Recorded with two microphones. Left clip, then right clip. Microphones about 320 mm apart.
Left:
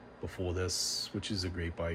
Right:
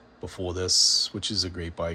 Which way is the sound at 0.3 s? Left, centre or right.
Centre.